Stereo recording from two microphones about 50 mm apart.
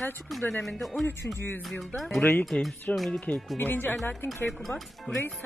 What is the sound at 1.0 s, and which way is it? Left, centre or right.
Speech, left.